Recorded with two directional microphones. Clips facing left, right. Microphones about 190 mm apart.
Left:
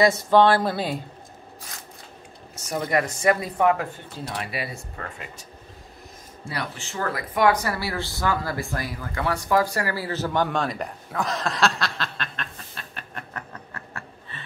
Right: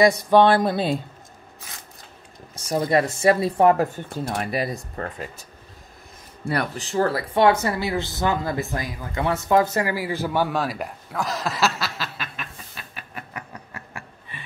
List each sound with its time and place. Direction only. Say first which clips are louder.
0.0 s speech: right 2 dB; 15° right (ahead or behind)
2.5 s speech: right 4 dB; 35° right (ahead or behind)
6.8 s speech: right 7 dB; 35° right (ahead or behind); by 14.4 s 15° right (ahead or behind)